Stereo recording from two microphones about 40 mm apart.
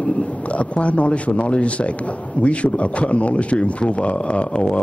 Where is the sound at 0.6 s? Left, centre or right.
Left.